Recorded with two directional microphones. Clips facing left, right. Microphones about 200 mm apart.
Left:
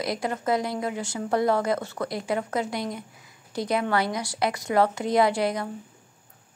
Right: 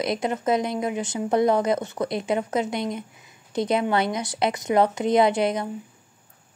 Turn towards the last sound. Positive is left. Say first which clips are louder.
# right 2 dB
turn(degrees=-20)  # may be behind; listen again after turning